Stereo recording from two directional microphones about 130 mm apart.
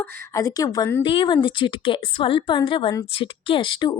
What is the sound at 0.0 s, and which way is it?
Speech, 25° left (ahead or behind).